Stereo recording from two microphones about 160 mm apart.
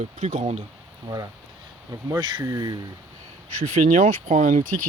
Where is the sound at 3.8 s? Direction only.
55° right (ahead or behind).